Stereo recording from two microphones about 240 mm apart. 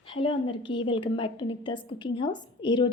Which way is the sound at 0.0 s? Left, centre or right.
Left.